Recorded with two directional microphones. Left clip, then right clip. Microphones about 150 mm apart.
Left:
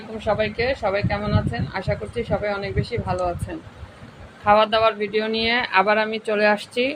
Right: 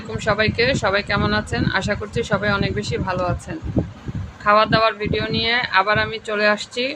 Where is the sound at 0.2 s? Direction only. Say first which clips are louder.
Right 3 dB; 20° right (ahead or behind).